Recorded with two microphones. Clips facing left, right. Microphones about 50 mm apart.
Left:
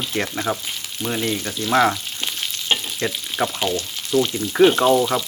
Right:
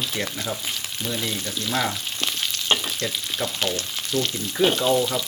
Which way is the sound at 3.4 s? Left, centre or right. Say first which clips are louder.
Left 7 dB; left.